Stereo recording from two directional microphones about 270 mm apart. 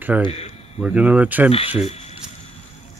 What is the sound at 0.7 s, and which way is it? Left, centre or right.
Speech, centre.